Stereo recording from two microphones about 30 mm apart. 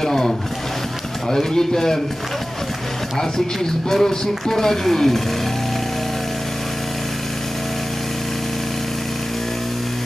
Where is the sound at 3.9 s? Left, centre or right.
Centre.